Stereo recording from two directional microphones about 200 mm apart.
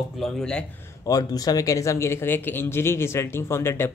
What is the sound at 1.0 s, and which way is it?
Speech, 15° left (ahead or behind).